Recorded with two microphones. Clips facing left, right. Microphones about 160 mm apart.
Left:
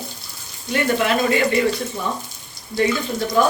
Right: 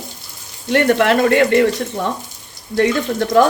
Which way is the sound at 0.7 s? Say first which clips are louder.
Right 6 dB; 70° right (ahead or behind).